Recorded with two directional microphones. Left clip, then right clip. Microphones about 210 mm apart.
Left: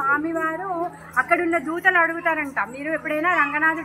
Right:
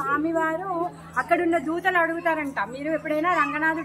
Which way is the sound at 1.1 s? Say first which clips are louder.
Left 2 dB; 10° right (ahead or behind).